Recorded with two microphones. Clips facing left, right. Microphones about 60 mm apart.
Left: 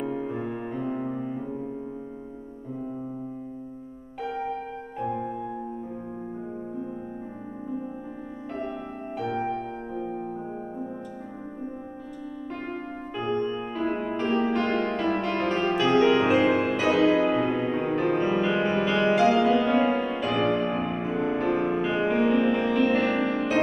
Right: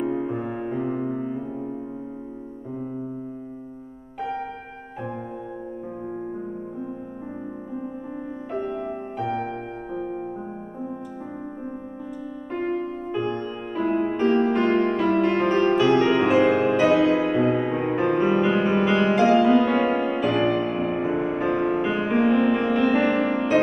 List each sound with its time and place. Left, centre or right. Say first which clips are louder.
0.0 s music: right 4 dB; centre
9.2 s music: right 1 dB; centre
9.5 s music: even; right
12.5 s music: right 11 dB; centre
16.2 s music: right 3 dB; centre
20.9 s music: right 3 dB; centre
21.4 s music: right 1 dB; centre